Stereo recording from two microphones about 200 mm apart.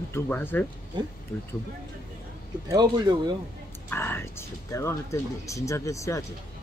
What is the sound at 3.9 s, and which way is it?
Speech, 10° left (ahead or behind).